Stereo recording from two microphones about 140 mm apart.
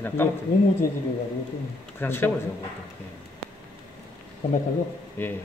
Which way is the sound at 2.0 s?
15° left (ahead or behind).